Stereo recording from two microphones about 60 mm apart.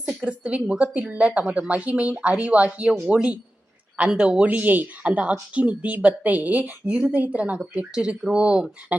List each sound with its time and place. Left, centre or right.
0.3 s speech: centre
8.9 s speech: right